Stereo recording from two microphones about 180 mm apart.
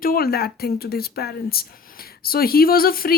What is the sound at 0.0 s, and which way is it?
Speech, 55° left (ahead or behind).